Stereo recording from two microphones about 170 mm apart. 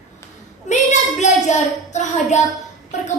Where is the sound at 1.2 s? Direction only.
45° left (ahead or behind).